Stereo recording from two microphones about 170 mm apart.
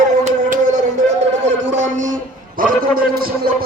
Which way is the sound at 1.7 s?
45° right (ahead or behind).